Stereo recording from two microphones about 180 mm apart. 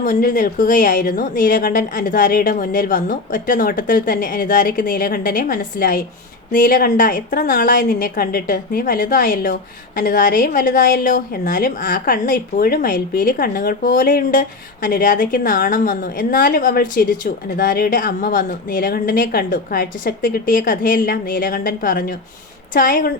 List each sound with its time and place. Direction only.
0.0 s a woman's voice: 55° left (ahead or behind)